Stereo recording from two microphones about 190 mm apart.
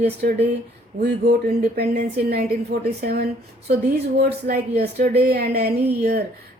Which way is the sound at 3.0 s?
55° right (ahead or behind).